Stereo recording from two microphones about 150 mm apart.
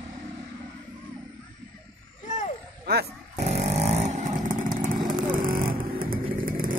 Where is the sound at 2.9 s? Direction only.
90° right.